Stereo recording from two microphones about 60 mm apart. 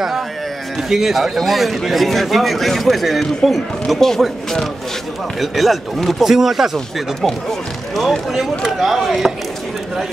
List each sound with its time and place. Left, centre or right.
0.8 s a man's voice: centre